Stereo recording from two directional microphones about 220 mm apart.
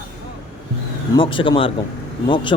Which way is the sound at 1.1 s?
20° left (ahead or behind).